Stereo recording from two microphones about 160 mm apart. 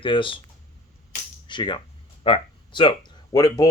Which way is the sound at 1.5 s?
30° left (ahead or behind).